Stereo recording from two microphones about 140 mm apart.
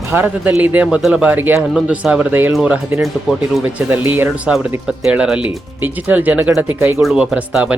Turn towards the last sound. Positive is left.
turn(degrees=-10)  # may be behind; listen again after turning